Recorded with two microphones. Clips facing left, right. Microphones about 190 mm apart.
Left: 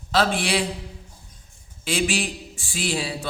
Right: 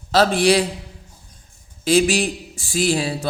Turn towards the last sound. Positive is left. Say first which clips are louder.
# right 7 dB
turn(degrees=-45)  # may be behind; listen again after turning